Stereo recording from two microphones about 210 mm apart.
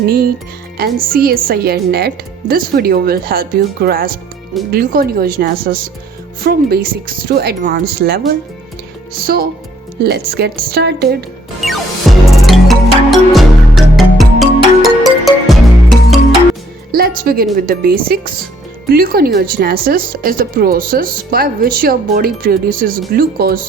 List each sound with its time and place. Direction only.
0.0 s speech: 45° right (ahead or behind)
9.2 s speech: 45° right (ahead or behind)
12.4 s music: centre (ahead or behind)
16.9 s speech: 45° right (ahead or behind)